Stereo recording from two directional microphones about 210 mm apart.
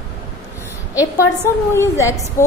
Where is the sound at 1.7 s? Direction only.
15° left (ahead or behind).